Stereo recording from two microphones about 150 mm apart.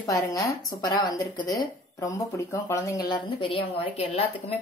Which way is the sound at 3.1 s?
35° left (ahead or behind).